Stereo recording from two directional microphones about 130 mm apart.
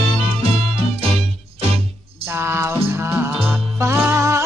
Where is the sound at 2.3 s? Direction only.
20° right (ahead or behind).